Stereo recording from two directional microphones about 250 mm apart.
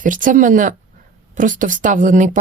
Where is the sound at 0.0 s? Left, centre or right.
Right.